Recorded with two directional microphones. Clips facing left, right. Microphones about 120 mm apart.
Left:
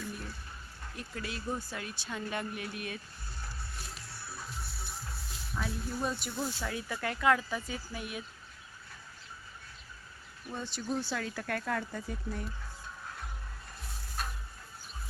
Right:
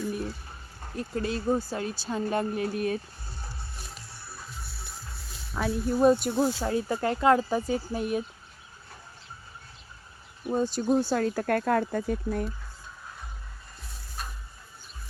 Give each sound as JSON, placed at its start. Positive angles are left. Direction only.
{"t": 0.8, "sound": "speech", "side_deg": -35}
{"t": 5.5, "sound": "speech", "side_deg": -60}
{"t": 10.5, "sound": "speech", "side_deg": -45}